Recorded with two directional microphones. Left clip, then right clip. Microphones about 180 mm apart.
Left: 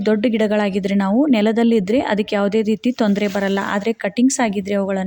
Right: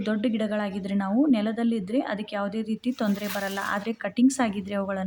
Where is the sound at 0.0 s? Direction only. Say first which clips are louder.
Left 10 dB; 35° left (ahead or behind).